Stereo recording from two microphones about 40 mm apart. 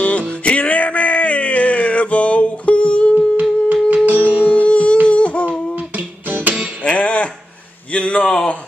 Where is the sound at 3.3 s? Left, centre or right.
Right.